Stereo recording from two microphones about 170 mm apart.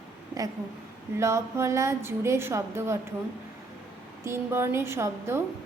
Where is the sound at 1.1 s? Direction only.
15° right (ahead or behind).